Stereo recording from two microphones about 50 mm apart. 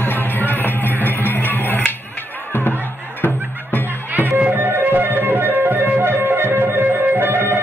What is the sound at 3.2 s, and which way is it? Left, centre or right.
Music, left.